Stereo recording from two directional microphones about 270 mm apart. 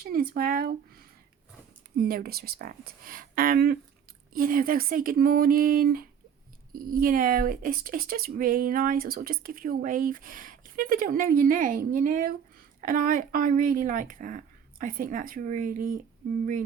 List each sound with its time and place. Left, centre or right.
0.0 s speech: right